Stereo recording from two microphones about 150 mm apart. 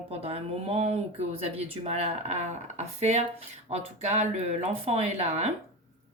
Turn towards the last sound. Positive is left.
turn(degrees=-45)  # may be behind; listen again after turning